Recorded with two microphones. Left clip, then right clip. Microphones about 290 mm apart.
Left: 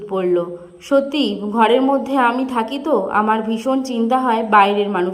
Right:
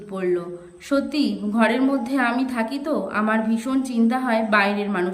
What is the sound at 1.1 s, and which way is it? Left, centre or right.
Speech, right.